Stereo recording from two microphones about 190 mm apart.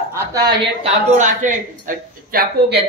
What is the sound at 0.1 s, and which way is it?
Speech, 20° right (ahead or behind).